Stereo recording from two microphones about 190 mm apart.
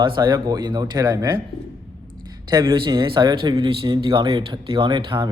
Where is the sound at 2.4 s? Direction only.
25° right (ahead or behind).